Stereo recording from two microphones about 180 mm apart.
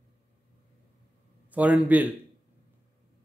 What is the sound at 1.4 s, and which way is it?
Speech, 10° right (ahead or behind).